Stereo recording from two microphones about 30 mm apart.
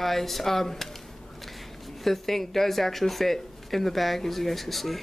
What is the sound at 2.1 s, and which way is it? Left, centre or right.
Speech, centre.